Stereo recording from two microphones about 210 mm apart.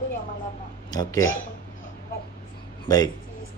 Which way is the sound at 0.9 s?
15° left (ahead or behind).